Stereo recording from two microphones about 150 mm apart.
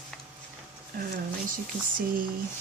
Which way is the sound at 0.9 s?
65° right (ahead or behind).